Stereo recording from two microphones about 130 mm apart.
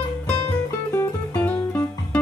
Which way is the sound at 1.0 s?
10° left (ahead or behind).